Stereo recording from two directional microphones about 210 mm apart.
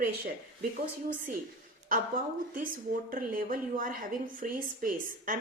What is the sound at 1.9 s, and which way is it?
A woman's voice, 40° right (ahead or behind).